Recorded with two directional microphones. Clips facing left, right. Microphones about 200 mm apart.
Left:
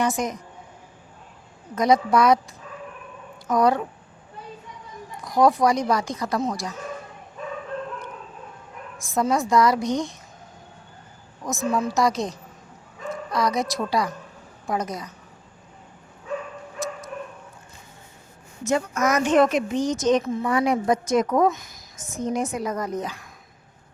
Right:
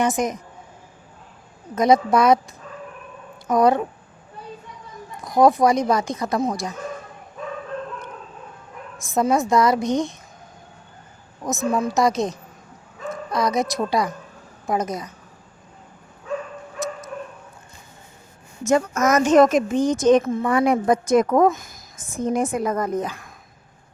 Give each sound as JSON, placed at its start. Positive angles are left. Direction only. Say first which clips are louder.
{"t": 0.0, "sound": "speech", "louder": "right 3 dB", "side_deg": -20}
{"t": 1.7, "sound": "speech", "louder": "right 2 dB", "side_deg": -25}
{"t": 3.4, "sound": "speech", "louder": "right 3 dB", "side_deg": -25}
{"t": 5.2, "sound": "speech", "louder": "right 3 dB", "side_deg": -20}
{"t": 9.0, "sound": "a woman's voice", "louder": "right 3 dB", "side_deg": -25}
{"t": 11.4, "sound": "speech", "louder": "right 2 dB", "side_deg": -20}
{"t": 18.6, "sound": "a woman's voice", "louder": "right 4 dB", "side_deg": -45}